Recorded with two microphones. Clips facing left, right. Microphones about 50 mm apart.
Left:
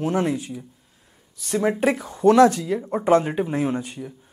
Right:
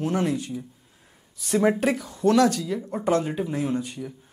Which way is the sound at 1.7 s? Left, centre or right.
Centre.